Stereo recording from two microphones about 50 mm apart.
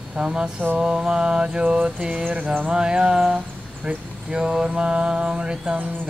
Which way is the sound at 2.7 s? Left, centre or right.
Centre.